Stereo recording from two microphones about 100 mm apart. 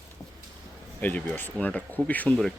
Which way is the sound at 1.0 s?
15° left (ahead or behind).